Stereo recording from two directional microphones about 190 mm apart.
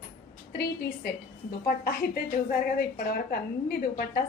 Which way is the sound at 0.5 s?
55° left (ahead or behind).